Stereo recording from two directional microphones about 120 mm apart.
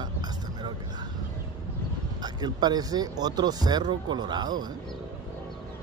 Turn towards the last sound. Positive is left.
turn(degrees=-35)  # may be behind; listen again after turning